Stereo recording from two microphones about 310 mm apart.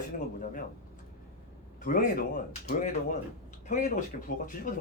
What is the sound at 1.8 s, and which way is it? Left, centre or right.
Speech, left.